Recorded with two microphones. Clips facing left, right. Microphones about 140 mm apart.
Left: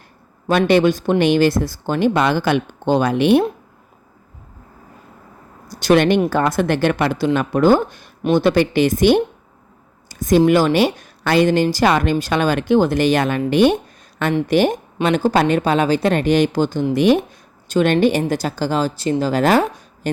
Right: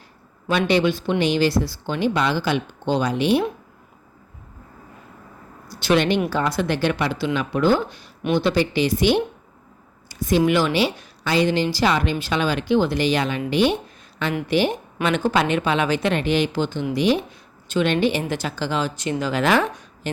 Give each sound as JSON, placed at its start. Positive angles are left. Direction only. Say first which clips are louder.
{"t": 0.4, "sound": "a woman's voice", "louder": "left 5 dB", "side_deg": 45}
{"t": 5.6, "sound": "a woman's voice", "louder": "left 5 dB", "side_deg": 45}